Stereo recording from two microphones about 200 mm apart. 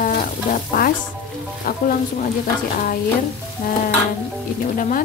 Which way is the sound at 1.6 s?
50° left (ahead or behind).